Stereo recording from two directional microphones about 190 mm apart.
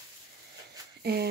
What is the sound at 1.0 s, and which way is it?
Speech, 55° right (ahead or behind).